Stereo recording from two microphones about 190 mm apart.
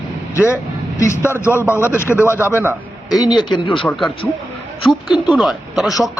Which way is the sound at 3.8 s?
Centre (ahead or behind).